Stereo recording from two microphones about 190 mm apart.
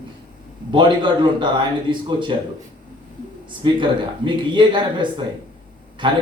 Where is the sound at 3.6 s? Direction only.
25° right (ahead or behind).